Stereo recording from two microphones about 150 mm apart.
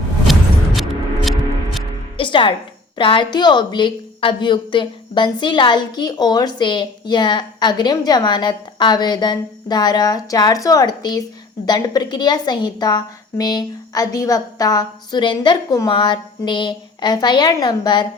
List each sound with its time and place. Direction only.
0.3 s music: centre (ahead or behind)
2.1 s music: 35° left (ahead or behind)
3.0 s a woman's voice: 35° left (ahead or behind)